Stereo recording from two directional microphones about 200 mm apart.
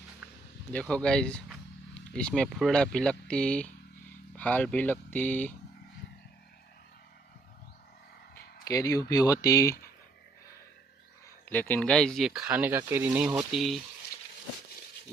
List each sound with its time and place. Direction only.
0.7 s speech: 5° left (ahead or behind)
8.6 s speech: 15° left (ahead or behind)
11.4 s speech: 10° left (ahead or behind)